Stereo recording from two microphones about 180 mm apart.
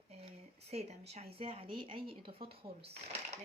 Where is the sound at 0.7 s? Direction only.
35° right (ahead or behind).